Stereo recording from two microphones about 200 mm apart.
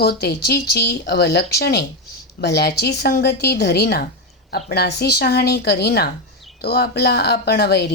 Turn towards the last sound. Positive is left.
turn(degrees=55)  # may be behind; listen again after turning